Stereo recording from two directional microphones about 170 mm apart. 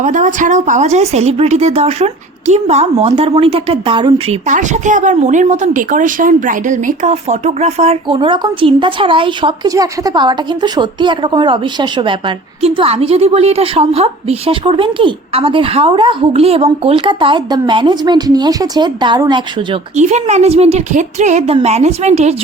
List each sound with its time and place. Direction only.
0.0 s a woman's voice: 50° right (ahead or behind); by 4.4 s 30° right (ahead or behind)
4.4 s speech: 45° right (ahead or behind)
8.0 s a woman's voice: 30° right (ahead or behind)
20.0 s a woman's voice: 45° right (ahead or behind)